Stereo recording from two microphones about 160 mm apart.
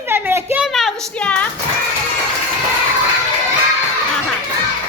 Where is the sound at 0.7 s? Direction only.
Centre (ahead or behind).